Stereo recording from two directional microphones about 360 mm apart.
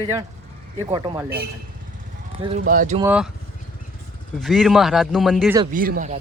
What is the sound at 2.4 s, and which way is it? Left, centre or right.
Speech, centre.